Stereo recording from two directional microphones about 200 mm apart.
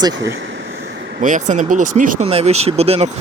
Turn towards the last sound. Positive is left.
turn(degrees=-30)  # may be behind; listen again after turning